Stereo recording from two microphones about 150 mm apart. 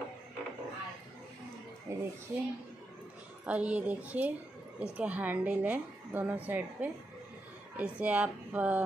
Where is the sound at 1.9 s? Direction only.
20° right (ahead or behind).